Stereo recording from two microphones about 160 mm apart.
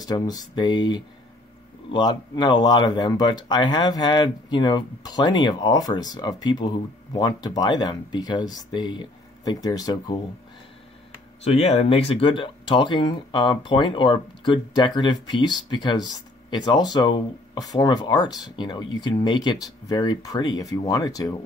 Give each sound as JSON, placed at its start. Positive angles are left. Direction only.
{"t": 0.0, "sound": "speech", "side_deg": 25}
{"t": 11.4, "sound": "speech", "side_deg": 40}